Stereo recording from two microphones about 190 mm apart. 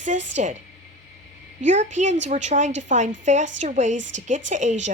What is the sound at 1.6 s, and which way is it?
Speech, 40° right (ahead or behind).